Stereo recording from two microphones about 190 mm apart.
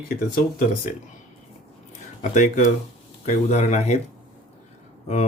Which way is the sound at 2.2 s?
40° left (ahead or behind).